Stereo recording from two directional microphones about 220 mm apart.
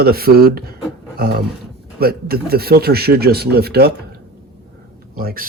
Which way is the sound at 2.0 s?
45° right (ahead or behind).